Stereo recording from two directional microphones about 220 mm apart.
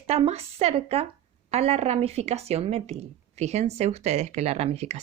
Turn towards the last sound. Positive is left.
turn(degrees=-30)  # may be behind; listen again after turning